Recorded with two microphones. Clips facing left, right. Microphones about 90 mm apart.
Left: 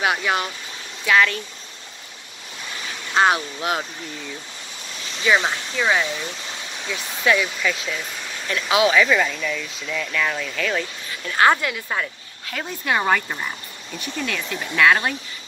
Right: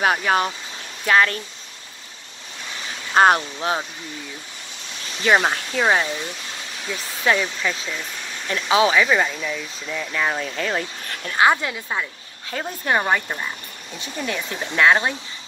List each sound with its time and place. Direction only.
0.0 s speech: 40° right (ahead or behind)
3.2 s speech: 45° right (ahead or behind)
3.5 s speech: 25° right (ahead or behind)
5.2 s speech: 40° right (ahead or behind)
7.2 s speech: 30° right (ahead or behind)
8.9 s speech: 10° right (ahead or behind); by 10.9 s 30° right (ahead or behind)
11.3 s speech: 15° right (ahead or behind)
12.4 s speech: 30° right (ahead or behind)
13.0 s speech: 10° right (ahead or behind)
14.1 s speech: 25° right (ahead or behind)